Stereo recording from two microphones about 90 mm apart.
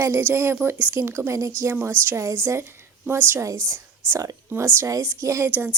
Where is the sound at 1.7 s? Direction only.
25° right (ahead or behind).